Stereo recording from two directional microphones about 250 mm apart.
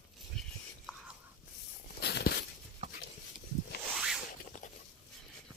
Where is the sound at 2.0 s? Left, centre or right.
Left.